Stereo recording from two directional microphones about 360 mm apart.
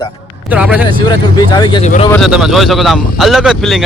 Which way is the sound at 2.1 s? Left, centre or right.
Centre.